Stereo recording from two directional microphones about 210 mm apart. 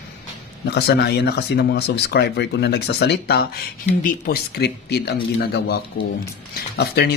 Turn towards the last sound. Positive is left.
turn(degrees=50)  # may be behind; listen again after turning